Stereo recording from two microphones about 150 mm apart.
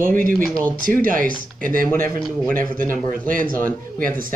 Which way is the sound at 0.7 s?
65° right (ahead or behind).